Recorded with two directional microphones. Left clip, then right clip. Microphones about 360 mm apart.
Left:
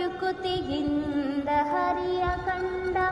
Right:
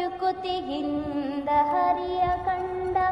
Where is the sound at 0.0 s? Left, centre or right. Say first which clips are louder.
Right 2 dB; right.